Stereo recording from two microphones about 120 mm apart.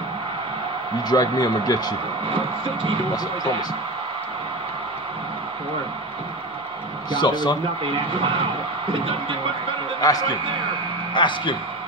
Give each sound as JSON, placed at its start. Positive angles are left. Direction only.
{"t": 1.0, "sound": "speech", "side_deg": 35}
{"t": 2.3, "sound": "speech", "side_deg": -45}
{"t": 7.1, "sound": "speech", "side_deg": 40}
{"t": 8.9, "sound": "speech", "side_deg": -45}
{"t": 10.0, "sound": "speech", "side_deg": 30}
{"t": 11.1, "sound": "speech", "side_deg": 40}